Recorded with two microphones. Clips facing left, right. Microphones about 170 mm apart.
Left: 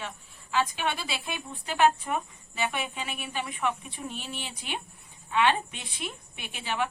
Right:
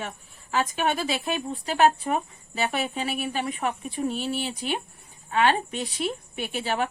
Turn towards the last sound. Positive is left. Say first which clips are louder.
# right 5 dB
turn(degrees=-40)  # may be behind; listen again after turning